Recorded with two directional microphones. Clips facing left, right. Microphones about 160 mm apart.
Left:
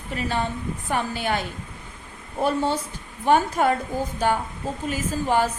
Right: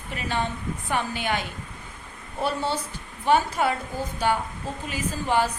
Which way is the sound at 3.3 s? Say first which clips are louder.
Left 2 dB; 45° left (ahead or behind).